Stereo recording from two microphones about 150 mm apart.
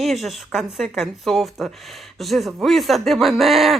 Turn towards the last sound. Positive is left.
turn(degrees=0)  # may be behind; listen again after turning